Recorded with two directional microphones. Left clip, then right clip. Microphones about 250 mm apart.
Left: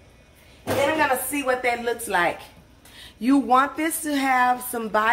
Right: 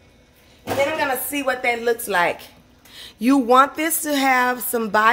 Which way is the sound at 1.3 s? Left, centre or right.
Right.